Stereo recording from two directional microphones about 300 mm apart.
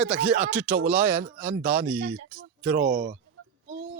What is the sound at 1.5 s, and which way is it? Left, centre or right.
Speech, right.